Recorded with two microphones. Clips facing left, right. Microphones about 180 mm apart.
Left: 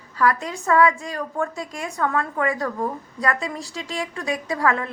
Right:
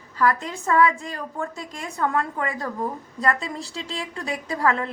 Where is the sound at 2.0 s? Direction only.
25° right (ahead or behind).